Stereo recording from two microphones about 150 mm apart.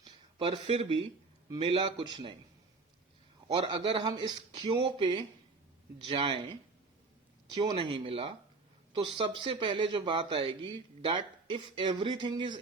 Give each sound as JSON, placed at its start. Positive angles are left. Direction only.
{"t": 0.0, "sound": "speech", "side_deg": -30}
{"t": 3.5, "sound": "speech", "side_deg": -35}